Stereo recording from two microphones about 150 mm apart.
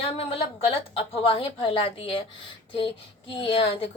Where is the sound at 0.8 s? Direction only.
40° left (ahead or behind).